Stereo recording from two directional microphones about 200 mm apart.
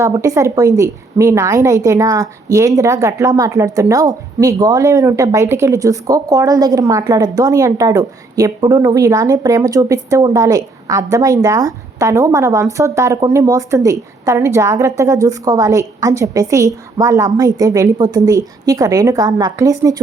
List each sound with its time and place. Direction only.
0.0 s a woman's voice: 15° right (ahead or behind)